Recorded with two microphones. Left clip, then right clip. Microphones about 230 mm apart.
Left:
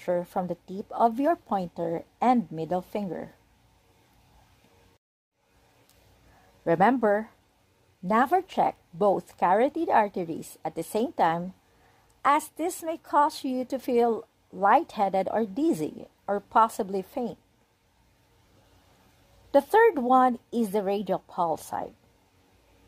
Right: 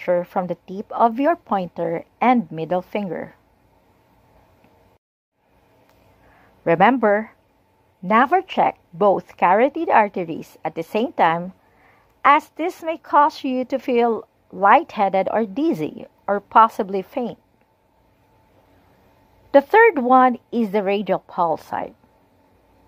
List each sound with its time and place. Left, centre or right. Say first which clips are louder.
0.0 s a woman's voice: right 8 dB; centre
6.6 s a woman's voice: right 7 dB; centre
19.5 s a woman's voice: right 7 dB; centre